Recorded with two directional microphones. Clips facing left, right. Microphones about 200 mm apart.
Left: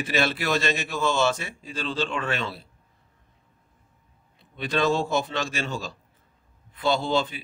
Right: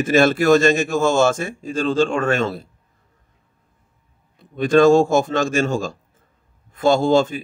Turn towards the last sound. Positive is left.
turn(degrees=-45)  # may be behind; listen again after turning